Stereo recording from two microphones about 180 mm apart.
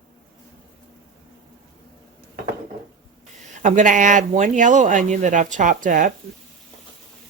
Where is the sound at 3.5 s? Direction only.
45° right (ahead or behind).